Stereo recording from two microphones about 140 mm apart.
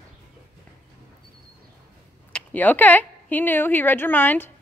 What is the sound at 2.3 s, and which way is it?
Speech, 10° left (ahead or behind).